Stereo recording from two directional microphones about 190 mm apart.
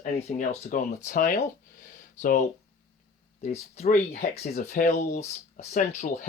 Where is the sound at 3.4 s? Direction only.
35° left (ahead or behind).